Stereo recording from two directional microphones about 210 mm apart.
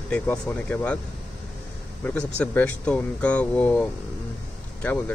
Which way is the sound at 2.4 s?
5° left (ahead or behind).